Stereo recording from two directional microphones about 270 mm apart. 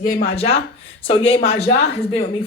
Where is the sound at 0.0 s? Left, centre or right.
Left.